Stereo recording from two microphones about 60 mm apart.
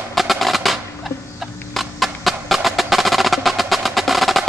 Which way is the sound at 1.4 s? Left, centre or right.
Centre.